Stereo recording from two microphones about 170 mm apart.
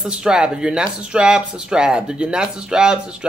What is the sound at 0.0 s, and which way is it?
Speech, 5° right (ahead or behind).